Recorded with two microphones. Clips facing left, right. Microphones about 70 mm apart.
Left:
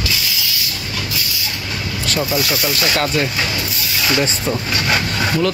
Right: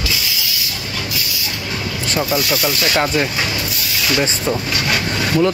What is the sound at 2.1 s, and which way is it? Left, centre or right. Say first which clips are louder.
Speech: right 1 dB; centre.